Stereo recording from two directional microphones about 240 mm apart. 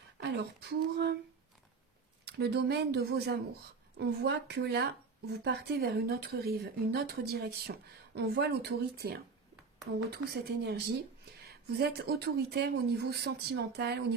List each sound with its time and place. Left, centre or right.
0.2 s speech: right
2.2 s speech: right